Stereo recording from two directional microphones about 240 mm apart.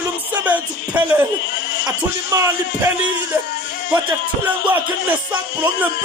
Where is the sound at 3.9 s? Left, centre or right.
Centre.